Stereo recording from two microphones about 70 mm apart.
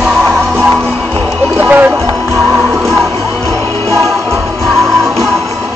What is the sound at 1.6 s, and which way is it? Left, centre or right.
Music, right.